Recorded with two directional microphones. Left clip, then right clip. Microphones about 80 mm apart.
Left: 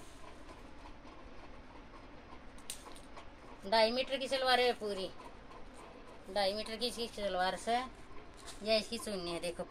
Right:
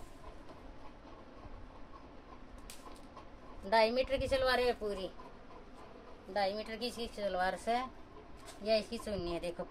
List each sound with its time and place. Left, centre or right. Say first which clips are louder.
3.7 s a woman's voice: right 1 dB; right
6.3 s a woman's voice: even; centre
7.6 s speech: even; right
8.9 s a woman's voice: right 1 dB; centre